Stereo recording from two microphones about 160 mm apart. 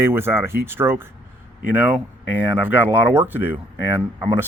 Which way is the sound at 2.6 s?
10° right (ahead or behind).